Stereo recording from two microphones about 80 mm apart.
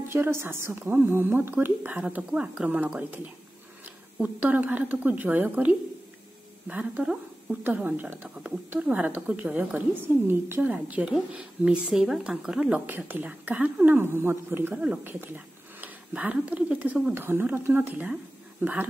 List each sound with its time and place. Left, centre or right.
0.1 s a woman's voice: right
2.1 s a woman's voice: centre; by 10.6 s right
10.6 s a woman's voice: centre
13.9 s a woman's voice: right
14.7 s speech: centre
15.0 s a woman's voice: right